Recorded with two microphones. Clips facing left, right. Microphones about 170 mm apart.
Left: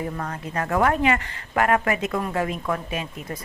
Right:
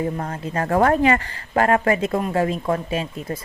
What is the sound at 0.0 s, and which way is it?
A woman's voice, 30° right (ahead or behind).